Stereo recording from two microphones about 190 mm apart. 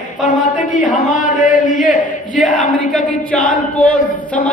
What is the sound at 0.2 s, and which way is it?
Speech, 40° left (ahead or behind).